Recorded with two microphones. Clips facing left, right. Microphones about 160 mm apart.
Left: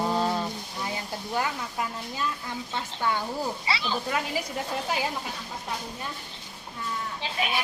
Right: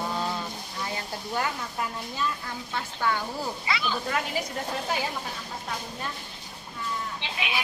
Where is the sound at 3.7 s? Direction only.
30° left (ahead or behind).